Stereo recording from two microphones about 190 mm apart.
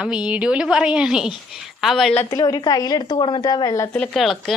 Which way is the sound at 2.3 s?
20° left (ahead or behind).